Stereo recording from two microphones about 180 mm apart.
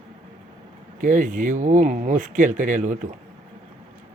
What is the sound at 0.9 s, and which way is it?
Speech, 45° right (ahead or behind).